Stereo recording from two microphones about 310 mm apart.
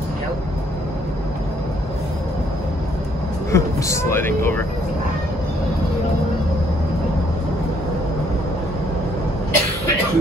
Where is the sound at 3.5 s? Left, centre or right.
Centre.